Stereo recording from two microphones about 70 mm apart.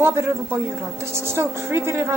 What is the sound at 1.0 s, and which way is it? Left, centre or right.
A woman's voice, right.